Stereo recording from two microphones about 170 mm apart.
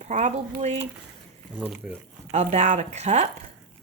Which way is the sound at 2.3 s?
40° right (ahead or behind).